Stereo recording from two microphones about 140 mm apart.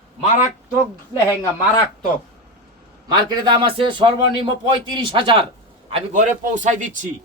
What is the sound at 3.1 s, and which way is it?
A man's voice, 30° right (ahead or behind).